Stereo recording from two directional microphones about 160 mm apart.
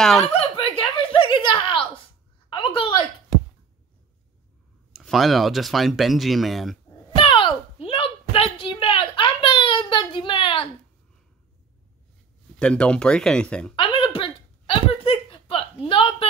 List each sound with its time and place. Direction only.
0.0 s speech: 5° left (ahead or behind)
0.3 s chuckle: 35° left (ahead or behind)
2.5 s a woman's voice: 30° left (ahead or behind)
4.9 s speech: centre (ahead or behind)
7.2 s a sound: 30° left (ahead or behind)
12.5 s speech: 5° left (ahead or behind)
13.7 s a sound: 30° left (ahead or behind)